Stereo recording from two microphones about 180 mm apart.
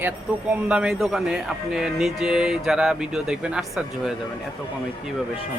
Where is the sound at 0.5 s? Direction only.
5° right (ahead or behind).